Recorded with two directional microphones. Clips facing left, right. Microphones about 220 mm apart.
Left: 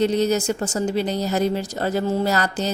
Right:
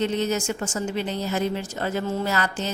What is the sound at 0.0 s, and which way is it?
Speech, 40° left (ahead or behind).